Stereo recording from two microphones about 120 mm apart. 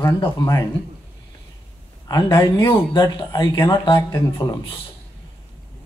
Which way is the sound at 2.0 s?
30° left (ahead or behind).